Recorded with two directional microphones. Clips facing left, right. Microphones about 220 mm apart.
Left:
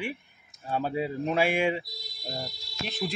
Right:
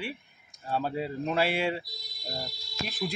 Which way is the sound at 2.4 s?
Centre (ahead or behind).